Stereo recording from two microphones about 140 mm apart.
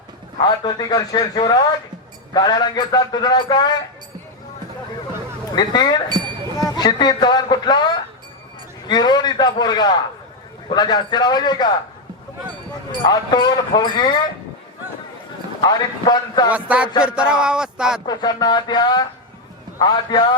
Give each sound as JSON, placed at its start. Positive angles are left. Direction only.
{"t": 0.3, "sound": "a man's voice", "side_deg": 30}
{"t": 5.5, "sound": "speech", "side_deg": 30}
{"t": 8.9, "sound": "speech", "side_deg": 30}
{"t": 13.1, "sound": "speech", "side_deg": 30}
{"t": 15.6, "sound": "a man's voice", "side_deg": 30}
{"t": 16.5, "sound": "a man's voice", "side_deg": -10}
{"t": 18.0, "sound": "a man's voice", "side_deg": 30}